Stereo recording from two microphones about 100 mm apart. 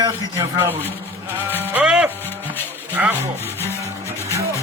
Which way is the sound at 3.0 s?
15° right (ahead or behind).